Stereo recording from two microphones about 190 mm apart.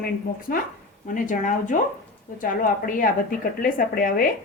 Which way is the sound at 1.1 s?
40° left (ahead or behind).